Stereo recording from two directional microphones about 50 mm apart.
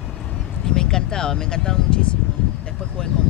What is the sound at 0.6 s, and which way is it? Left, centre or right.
Speech, centre.